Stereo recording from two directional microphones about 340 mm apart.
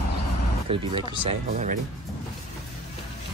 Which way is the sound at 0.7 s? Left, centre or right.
Centre.